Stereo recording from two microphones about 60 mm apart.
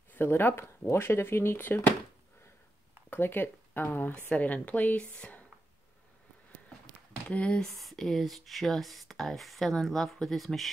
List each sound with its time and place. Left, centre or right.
0.1 s speech: left
3.1 s speech: left
4.4 s speech: left
7.2 s speech: centre
7.7 s speech: centre